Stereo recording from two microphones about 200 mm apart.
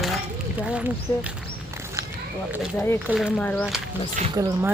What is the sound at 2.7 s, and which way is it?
Speech, 10° left (ahead or behind).